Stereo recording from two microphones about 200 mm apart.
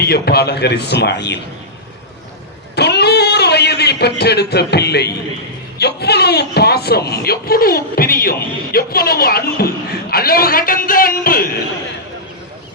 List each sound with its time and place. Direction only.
0.0 s a man's voice: 50° left (ahead or behind)
2.7 s a sound: 55° left (ahead or behind)
5.8 s speech: 55° left (ahead or behind)